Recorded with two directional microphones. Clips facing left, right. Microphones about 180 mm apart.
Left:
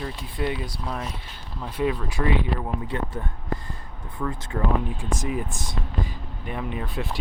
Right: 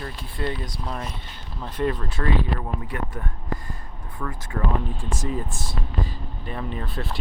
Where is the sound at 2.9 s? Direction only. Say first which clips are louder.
Left 2 dB; 25° left (ahead or behind).